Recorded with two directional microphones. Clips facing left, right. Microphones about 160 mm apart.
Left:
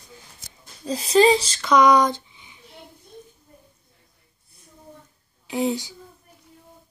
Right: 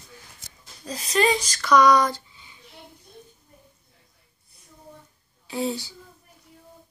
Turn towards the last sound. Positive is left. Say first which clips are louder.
# left 4 dB
turn(degrees=15)  # may be behind; listen again after turning